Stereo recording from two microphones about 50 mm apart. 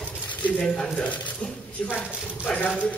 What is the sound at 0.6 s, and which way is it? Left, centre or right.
Speech, centre.